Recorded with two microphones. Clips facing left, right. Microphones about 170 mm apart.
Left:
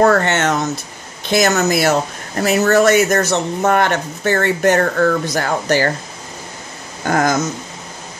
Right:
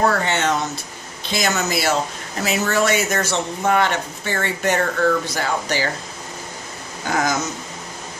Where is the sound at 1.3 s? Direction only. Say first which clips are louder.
Left 7 dB; 45° left (ahead or behind).